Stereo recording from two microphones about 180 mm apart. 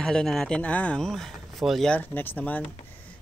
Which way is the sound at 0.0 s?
5° left (ahead or behind).